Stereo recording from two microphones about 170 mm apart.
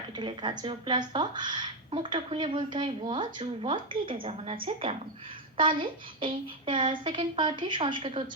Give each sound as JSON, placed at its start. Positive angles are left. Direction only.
{"t": 0.2, "sound": "a woman's voice", "side_deg": -25}